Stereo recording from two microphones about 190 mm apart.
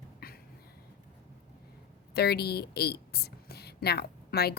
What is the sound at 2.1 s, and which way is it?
A woman's voice, 55° left (ahead or behind).